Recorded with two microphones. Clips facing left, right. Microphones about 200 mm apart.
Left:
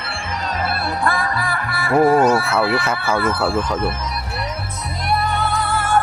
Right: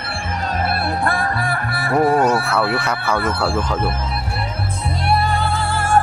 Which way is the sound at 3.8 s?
30° right (ahead or behind).